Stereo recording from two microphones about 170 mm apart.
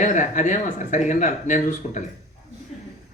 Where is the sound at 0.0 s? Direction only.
45° left (ahead or behind).